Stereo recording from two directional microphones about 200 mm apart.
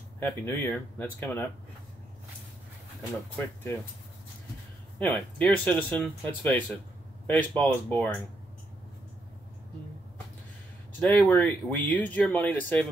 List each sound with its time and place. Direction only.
0.2 s speech: 10° left (ahead or behind)
3.3 s speech: 10° left (ahead or behind)
4.9 s speech: 10° left (ahead or behind)
11.0 s speech: 10° left (ahead or behind)